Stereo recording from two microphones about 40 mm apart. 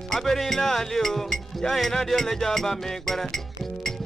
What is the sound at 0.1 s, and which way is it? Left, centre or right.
Music, centre.